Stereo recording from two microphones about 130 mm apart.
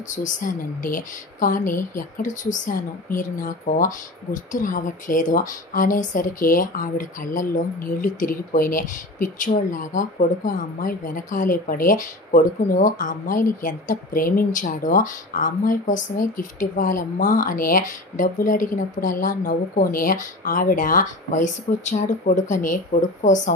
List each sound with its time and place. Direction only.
0.1 s speech: 80° left